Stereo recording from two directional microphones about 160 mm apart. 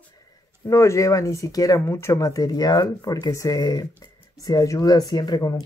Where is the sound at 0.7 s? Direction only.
20° left (ahead or behind).